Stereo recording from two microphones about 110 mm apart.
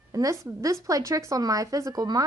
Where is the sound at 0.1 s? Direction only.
30° right (ahead or behind).